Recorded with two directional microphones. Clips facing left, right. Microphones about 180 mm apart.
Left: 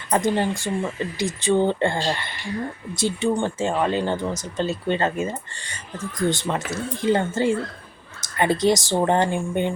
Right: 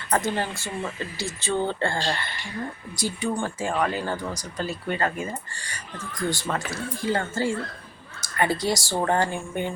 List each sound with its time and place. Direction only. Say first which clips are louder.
0.1 s speech: left 4 dB; 15° left (ahead or behind)